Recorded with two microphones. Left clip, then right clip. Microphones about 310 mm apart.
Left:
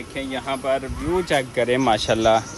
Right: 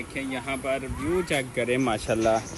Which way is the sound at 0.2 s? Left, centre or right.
Centre.